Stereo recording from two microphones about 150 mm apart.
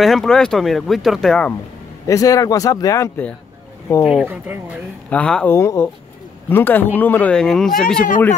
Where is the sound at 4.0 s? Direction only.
Centre (ahead or behind).